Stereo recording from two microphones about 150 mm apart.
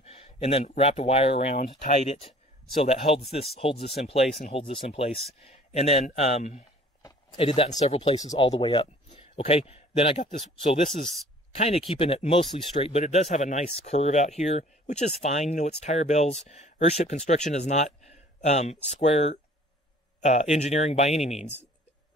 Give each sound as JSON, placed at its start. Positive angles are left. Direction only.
{"t": 0.0, "sound": "a sound", "side_deg": 45}
{"t": 0.7, "sound": "speech", "side_deg": 50}
{"t": 7.3, "sound": "speech", "side_deg": 40}
{"t": 8.4, "sound": "a man's voice", "side_deg": 35}
{"t": 11.5, "sound": "speech", "side_deg": 45}